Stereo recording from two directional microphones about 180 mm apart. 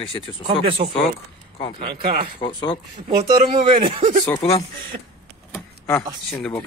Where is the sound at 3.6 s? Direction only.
30° right (ahead or behind).